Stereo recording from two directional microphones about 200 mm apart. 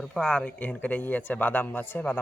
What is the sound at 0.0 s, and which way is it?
A man's voice, 5° left (ahead or behind).